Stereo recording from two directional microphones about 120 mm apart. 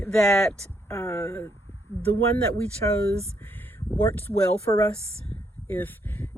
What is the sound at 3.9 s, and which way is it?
Speech, 15° left (ahead or behind).